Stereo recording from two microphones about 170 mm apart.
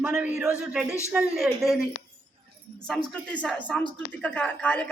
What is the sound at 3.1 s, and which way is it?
Speech, 5° left (ahead or behind).